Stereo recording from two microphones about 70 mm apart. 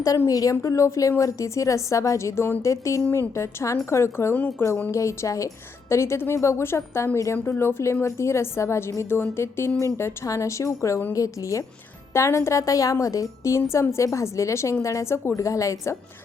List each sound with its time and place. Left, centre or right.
0.3 s a woman's voice: left
0.6 s a woman's voice: left
13.6 s a woman's voice: left
15.4 s a woman's voice: left